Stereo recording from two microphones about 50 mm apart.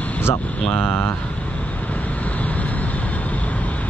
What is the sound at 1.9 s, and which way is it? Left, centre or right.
Vehicle, left.